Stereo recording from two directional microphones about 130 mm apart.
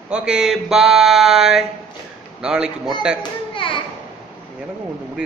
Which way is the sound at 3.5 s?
40° left (ahead or behind).